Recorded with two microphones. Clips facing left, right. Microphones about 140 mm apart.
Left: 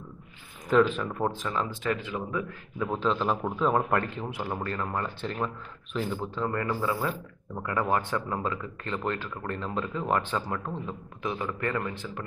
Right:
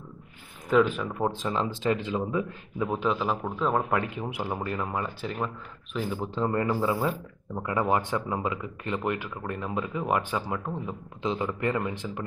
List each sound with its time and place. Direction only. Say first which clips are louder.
0.7 s speech: even; centre (ahead or behind)
1.3 s speech: right 2 dB; 20° right (ahead or behind); by 4.1 s centre (ahead or behind)
4.1 s speech: right 1 dB; 15° right (ahead or behind)
6.2 s speech: right 3 dB; 20° right (ahead or behind)